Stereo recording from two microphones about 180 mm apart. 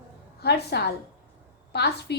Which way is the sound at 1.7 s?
65° left (ahead or behind).